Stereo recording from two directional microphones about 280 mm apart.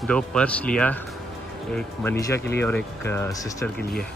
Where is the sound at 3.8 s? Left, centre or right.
Left.